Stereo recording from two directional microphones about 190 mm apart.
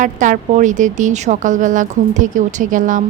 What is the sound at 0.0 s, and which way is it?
A woman's voice, 40° right (ahead or behind).